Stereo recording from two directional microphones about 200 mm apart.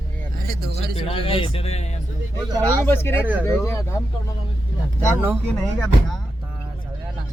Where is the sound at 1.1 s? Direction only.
30° left (ahead or behind).